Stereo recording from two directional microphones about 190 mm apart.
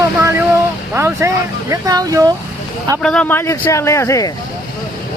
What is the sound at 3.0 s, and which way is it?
Speech, 5° left (ahead or behind).